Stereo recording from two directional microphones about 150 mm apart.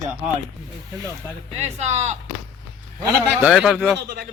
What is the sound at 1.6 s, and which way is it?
Speech, 45° right (ahead or behind).